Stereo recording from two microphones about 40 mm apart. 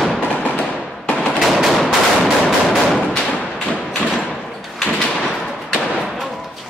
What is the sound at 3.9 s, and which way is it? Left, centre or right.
Thump, centre.